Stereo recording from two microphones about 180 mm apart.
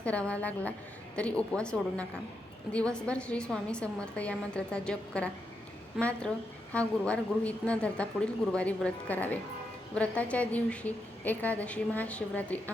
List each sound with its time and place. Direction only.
0.0 s a woman's voice: 5° left (ahead or behind)